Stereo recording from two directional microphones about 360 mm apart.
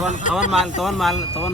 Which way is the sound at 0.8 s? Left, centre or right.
Centre.